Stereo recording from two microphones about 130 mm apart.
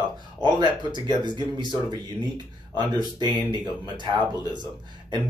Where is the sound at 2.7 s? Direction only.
35° right (ahead or behind).